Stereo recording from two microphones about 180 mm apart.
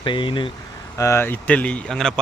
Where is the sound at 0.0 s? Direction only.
30° left (ahead or behind).